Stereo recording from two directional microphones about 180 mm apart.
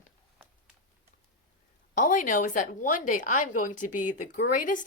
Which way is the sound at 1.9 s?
45° left (ahead or behind).